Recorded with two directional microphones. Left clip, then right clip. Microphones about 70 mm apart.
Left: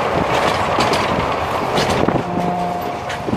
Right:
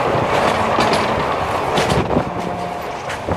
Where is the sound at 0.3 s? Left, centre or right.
Left.